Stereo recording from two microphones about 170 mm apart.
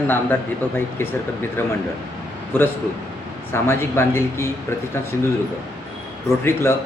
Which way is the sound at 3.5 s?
15° left (ahead or behind).